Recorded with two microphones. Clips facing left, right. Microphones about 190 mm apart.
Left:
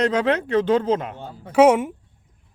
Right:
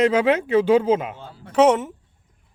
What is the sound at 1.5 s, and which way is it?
Speech, 10° left (ahead or behind).